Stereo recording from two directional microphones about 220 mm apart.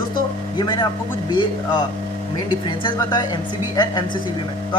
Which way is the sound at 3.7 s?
20° left (ahead or behind).